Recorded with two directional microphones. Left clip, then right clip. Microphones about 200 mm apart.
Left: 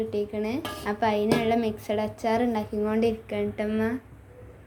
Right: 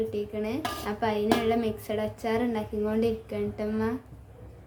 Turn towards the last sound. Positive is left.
turn(degrees=20)  # may be behind; listen again after turning